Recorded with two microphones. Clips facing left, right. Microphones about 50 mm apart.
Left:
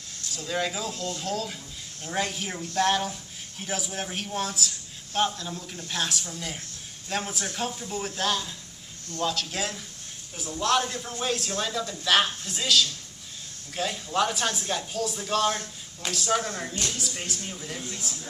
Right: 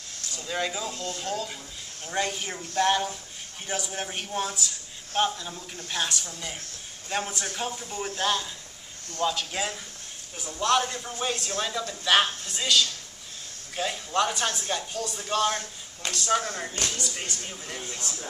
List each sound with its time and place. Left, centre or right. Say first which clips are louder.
0.4 s a man's voice: left 1 dB; centre